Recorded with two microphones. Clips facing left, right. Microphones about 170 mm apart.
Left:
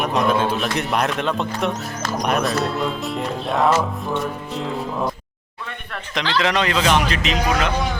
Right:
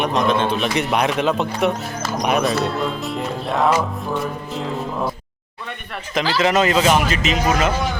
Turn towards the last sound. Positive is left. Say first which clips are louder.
# right 2 dB
turn(degrees=0)  # may be behind; listen again after turning